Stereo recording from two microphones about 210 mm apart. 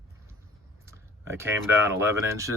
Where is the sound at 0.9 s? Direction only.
10° right (ahead or behind).